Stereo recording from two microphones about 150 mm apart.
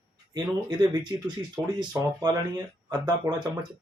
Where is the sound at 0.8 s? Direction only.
30° right (ahead or behind).